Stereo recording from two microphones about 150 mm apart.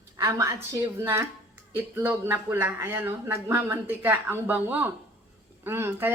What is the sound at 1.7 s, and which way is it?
Speech, 15° right (ahead or behind).